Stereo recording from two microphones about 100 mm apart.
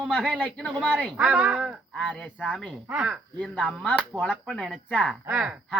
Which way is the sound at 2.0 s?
10° left (ahead or behind).